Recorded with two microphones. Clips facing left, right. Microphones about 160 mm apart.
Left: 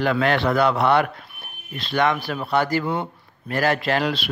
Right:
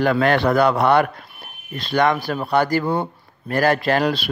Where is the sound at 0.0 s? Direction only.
45° right (ahead or behind).